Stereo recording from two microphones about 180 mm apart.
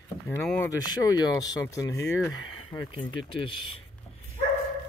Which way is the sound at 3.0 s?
25° left (ahead or behind).